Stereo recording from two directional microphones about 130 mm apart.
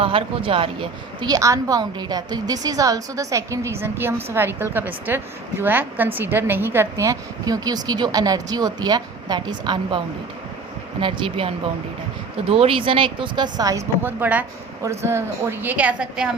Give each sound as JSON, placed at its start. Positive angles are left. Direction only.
{"t": 0.0, "sound": "a woman's voice", "side_deg": -45}
{"t": 11.0, "sound": "a woman's voice", "side_deg": -40}